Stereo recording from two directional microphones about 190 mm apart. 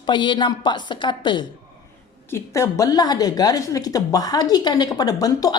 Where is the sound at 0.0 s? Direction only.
25° left (ahead or behind).